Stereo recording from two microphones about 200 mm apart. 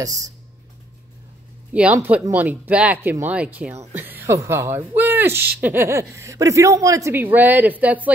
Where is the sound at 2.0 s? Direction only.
10° right (ahead or behind).